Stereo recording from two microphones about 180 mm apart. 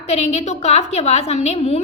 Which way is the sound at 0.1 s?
35° left (ahead or behind).